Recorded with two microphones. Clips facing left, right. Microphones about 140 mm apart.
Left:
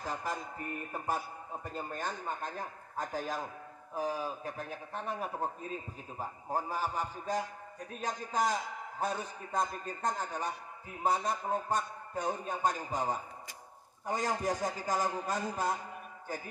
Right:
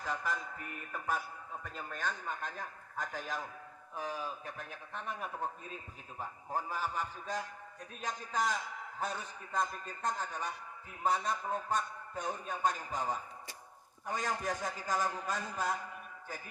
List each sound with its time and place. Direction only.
0.0 s a man's voice: 35° left (ahead or behind)
12.2 s a man's voice: 25° left (ahead or behind)
12.6 s a man's voice: 40° left (ahead or behind)